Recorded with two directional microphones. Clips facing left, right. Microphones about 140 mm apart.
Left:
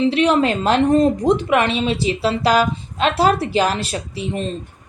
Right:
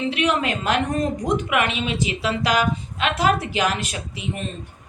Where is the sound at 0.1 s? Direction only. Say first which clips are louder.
Left 6 dB; 30° left (ahead or behind).